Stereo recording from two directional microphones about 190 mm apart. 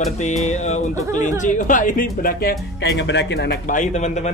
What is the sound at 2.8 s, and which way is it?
Speech, 65° left (ahead or behind).